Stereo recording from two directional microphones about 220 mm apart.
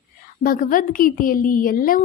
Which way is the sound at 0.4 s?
40° left (ahead or behind).